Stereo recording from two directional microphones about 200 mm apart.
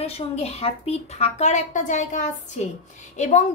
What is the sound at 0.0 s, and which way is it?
Speech, 30° left (ahead or behind).